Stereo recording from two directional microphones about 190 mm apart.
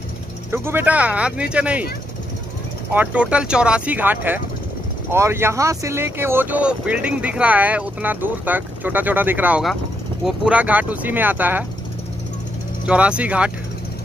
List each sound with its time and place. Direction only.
0.5 s speech: 10° right (ahead or behind)
2.9 s speech: 10° right (ahead or behind)
12.8 s speech: 5° right (ahead or behind)